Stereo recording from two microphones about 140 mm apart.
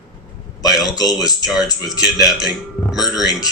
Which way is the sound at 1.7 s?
25° left (ahead or behind).